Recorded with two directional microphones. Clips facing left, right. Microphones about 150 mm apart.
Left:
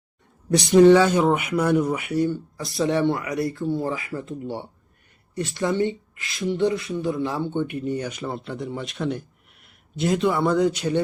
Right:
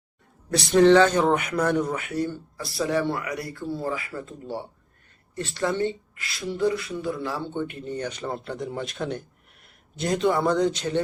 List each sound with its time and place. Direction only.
0.5 s speech: 15° left (ahead or behind)